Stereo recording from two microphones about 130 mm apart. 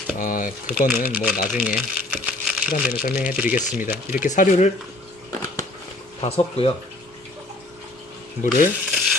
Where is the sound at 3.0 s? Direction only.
90° left.